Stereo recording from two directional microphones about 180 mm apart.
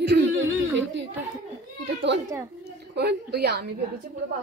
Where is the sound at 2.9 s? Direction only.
65° right (ahead or behind).